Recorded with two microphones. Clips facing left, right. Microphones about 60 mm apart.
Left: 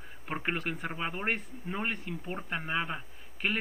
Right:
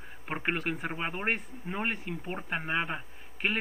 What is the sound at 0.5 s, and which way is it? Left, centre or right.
A man's voice, centre.